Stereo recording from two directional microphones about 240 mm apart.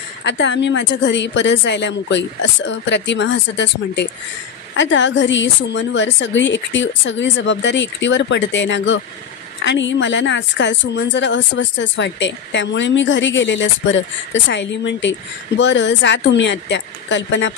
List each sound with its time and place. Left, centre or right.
0.2 s a woman's voice: left